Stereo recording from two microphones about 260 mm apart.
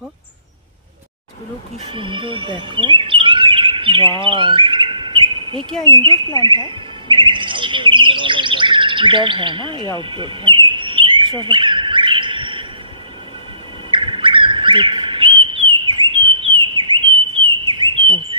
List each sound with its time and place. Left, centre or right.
2.0 s speech: centre
4.2 s chirp: centre
5.9 s speech: centre
6.7 s chirp: centre
13.8 s bird: centre
17.4 s a sound: centre